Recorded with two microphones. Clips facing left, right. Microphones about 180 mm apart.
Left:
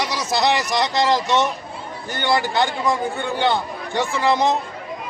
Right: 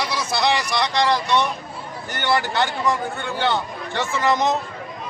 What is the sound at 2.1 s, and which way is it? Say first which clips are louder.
A man's voice: left 2 dB; 15° left (ahead or behind).